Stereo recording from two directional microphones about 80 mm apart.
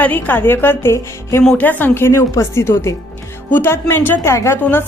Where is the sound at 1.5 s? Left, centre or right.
Left.